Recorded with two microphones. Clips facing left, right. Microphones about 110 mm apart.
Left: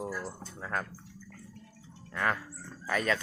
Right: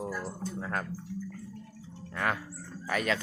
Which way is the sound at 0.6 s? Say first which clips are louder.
Left 1 dB; 20° right (ahead or behind).